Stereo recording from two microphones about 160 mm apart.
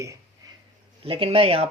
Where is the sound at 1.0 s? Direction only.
35° right (ahead or behind).